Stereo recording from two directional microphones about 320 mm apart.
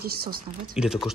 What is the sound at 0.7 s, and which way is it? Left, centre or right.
Speech, centre.